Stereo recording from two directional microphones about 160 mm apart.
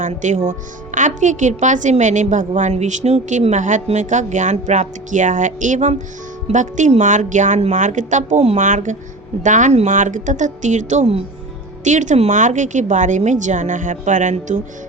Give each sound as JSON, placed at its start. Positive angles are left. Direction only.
{"t": 0.0, "sound": "speech", "side_deg": -50}